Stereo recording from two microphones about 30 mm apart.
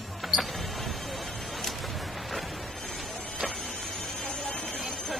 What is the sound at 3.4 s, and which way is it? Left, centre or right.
Printer, left.